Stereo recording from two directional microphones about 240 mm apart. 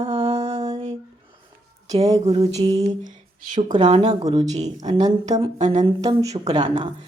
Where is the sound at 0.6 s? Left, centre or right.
Centre.